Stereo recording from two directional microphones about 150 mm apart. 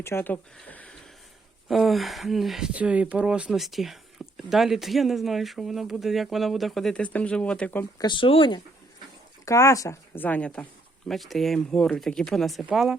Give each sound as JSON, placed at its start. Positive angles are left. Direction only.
{"t": 0.0, "sound": "speech", "side_deg": 15}
{"t": 7.9, "sound": "speech", "side_deg": 30}
{"t": 9.5, "sound": "speech", "side_deg": 20}